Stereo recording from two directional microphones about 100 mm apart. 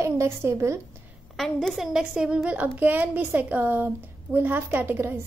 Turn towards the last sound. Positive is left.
turn(degrees=-20)  # may be behind; listen again after turning